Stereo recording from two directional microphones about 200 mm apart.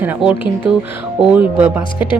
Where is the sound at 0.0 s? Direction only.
10° right (ahead or behind).